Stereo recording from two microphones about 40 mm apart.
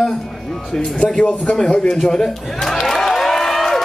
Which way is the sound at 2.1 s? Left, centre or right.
Centre.